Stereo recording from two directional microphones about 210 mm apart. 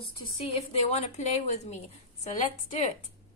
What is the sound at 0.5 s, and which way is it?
A woman's voice, 30° left (ahead or behind).